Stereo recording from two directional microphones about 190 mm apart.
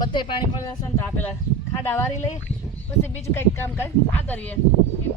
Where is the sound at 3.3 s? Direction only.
10° left (ahead or behind).